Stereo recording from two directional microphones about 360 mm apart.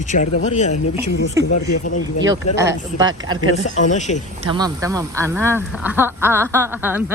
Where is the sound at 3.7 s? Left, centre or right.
Centre.